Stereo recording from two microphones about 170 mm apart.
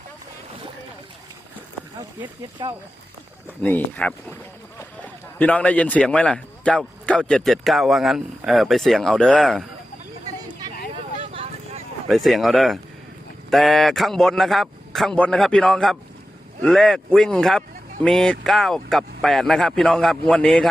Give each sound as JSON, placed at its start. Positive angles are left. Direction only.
{"t": 2.6, "sound": "speech", "side_deg": -25}
{"t": 3.6, "sound": "speech", "side_deg": 10}
{"t": 5.4, "sound": "a man's voice", "side_deg": 10}
{"t": 10.9, "sound": "vehicle", "side_deg": -35}
{"t": 12.0, "sound": "a man's voice", "side_deg": 0}